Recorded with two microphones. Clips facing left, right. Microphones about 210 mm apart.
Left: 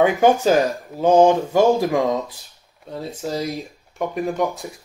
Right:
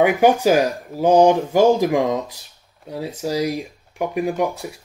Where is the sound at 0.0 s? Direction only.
10° right (ahead or behind).